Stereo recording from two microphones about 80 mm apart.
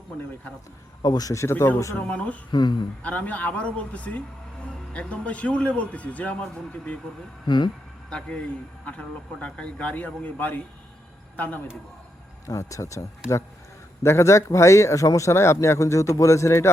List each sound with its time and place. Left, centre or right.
1.0 s a man's voice: left
1.3 s speech: left
2.0 s a man's voice: centre
2.5 s speech: left
3.0 s a man's voice: centre
7.4 s speech: left
8.1 s a man's voice: centre
12.5 s speech: left